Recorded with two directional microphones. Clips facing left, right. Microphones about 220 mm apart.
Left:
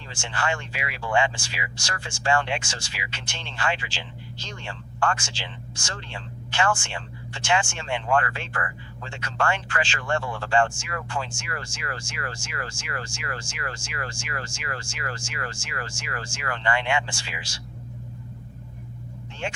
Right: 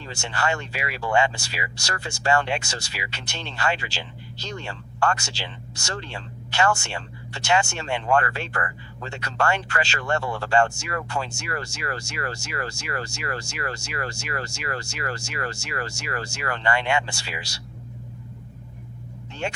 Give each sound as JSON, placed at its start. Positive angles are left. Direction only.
{"t": 0.1, "sound": "speech", "side_deg": -40}
{"t": 19.4, "sound": "speech", "side_deg": -40}